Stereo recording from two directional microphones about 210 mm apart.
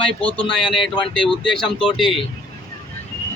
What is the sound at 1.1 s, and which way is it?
A man's voice, 5° left (ahead or behind).